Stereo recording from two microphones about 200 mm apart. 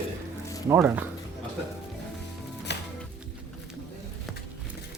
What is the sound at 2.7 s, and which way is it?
Music, 60° left (ahead or behind).